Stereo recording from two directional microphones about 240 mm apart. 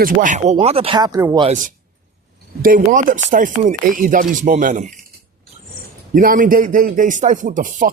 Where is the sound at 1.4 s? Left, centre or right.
Right.